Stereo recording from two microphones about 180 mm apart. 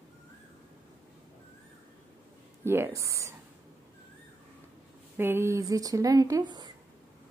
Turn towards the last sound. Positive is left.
turn(degrees=-25)  # may be behind; listen again after turning